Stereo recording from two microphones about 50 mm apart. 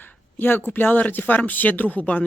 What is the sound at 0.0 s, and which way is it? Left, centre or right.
Speech, left.